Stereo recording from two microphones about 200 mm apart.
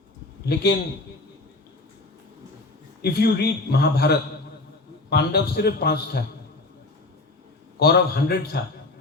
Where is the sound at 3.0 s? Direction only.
50° left (ahead or behind).